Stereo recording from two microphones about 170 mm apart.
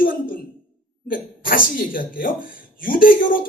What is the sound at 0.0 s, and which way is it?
Sigh, 55° left (ahead or behind).